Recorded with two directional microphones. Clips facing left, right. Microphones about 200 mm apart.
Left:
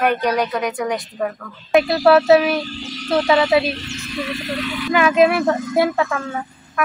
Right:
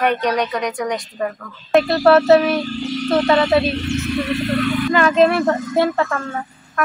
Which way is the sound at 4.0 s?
60° right (ahead or behind).